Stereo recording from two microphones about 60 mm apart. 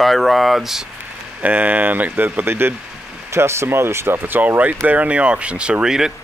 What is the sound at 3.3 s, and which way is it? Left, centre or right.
Speech, right.